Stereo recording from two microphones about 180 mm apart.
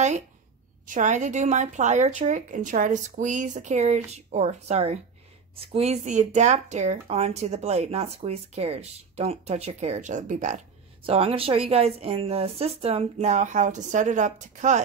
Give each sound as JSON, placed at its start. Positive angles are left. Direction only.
{"t": 0.8, "sound": "speech", "side_deg": -45}
{"t": 11.1, "sound": "speech", "side_deg": -30}